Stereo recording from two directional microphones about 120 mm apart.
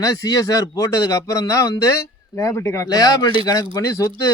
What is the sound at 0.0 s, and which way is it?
A man's voice, 30° left (ahead or behind).